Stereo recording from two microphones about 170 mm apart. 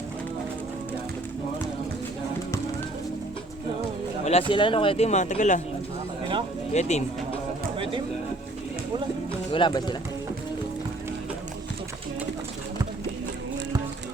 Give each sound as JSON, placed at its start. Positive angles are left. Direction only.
{"t": 4.3, "sound": "speech", "side_deg": 35}
{"t": 6.7, "sound": "speech", "side_deg": 45}
{"t": 7.8, "sound": "a sound", "side_deg": -30}
{"t": 9.5, "sound": "speech", "side_deg": 30}